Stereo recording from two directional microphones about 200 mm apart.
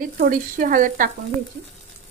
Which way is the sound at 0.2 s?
45° right (ahead or behind).